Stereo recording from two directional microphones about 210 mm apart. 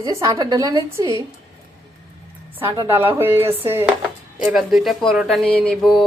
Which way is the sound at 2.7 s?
15° right (ahead or behind).